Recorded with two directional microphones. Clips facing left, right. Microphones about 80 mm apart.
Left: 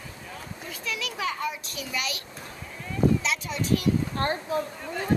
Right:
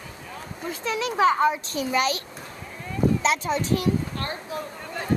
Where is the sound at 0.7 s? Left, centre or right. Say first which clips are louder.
Right 8 dB; right.